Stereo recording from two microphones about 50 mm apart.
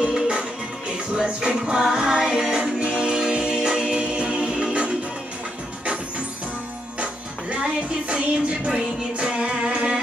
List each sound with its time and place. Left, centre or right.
0.1 s music: centre
7.0 s music: right